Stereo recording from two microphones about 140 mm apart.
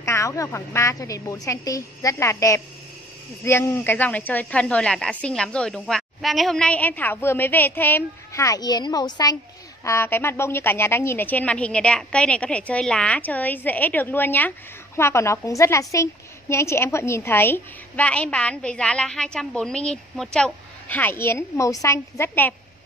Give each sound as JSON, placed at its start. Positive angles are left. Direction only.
{"t": 0.0, "sound": "a woman's voice", "side_deg": 20}
{"t": 9.8, "sound": "speech", "side_deg": 15}